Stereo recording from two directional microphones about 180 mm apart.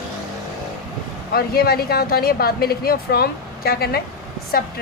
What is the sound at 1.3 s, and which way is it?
Speech, 60° left (ahead or behind).